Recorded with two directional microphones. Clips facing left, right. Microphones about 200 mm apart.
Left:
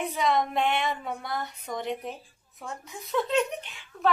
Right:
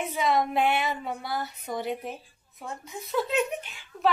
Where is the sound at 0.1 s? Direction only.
5° right (ahead or behind).